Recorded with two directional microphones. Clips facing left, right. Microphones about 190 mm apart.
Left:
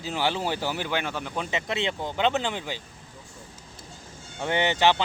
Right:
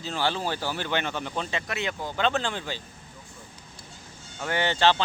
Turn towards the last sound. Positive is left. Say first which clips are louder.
# left 1 dB
turn(degrees=15)  # may be behind; listen again after turning